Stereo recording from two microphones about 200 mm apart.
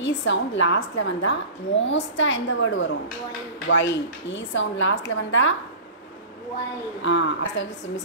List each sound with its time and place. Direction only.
0.0 s a woman's voice: 65° left (ahead or behind)
7.0 s speech: 65° left (ahead or behind)